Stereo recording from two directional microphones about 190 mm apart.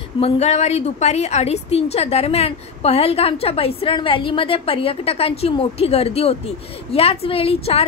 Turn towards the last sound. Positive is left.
turn(degrees=30)  # may be behind; listen again after turning